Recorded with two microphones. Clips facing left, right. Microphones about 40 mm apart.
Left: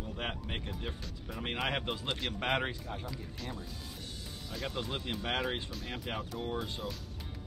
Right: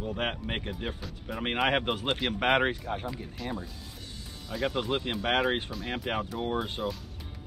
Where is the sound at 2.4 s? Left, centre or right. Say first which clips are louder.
Right 8 dB; right.